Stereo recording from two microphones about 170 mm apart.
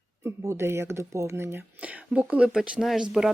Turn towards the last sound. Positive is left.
turn(degrees=-5)  # may be behind; listen again after turning